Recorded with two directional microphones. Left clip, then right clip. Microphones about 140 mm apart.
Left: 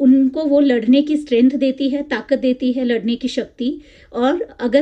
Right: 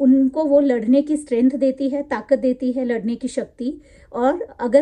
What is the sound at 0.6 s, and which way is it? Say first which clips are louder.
A woman's voice: left 3 dB; 25° left (ahead or behind).